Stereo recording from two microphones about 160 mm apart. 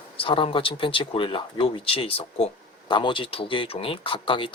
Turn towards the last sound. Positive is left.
turn(degrees=30)  # may be behind; listen again after turning